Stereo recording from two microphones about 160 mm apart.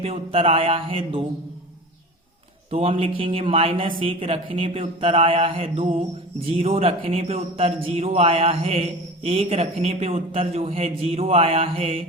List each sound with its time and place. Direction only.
0.0 s a man's voice: 35° right (ahead or behind)
2.6 s a man's voice: 40° right (ahead or behind)